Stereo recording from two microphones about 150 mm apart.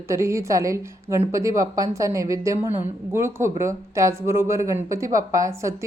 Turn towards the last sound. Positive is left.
turn(degrees=-20)  # may be behind; listen again after turning